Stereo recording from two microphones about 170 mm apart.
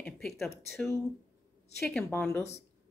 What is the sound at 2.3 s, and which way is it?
Speech, 15° left (ahead or behind).